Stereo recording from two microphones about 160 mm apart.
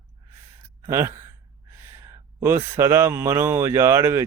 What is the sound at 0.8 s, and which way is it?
Speech, 15° right (ahead or behind).